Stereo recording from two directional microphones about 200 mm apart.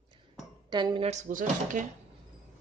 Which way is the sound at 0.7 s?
20° right (ahead or behind).